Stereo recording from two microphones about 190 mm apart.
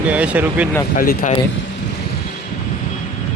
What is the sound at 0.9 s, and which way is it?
Speech, 45° left (ahead or behind).